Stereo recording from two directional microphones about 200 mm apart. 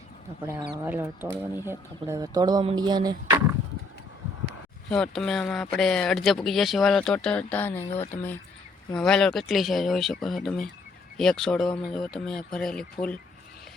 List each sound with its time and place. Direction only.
0.9 s speech: 10° right (ahead or behind)
4.9 s speech: 5° left (ahead or behind)